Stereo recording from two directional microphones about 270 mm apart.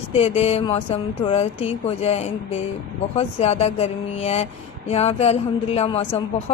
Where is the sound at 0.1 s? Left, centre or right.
Left.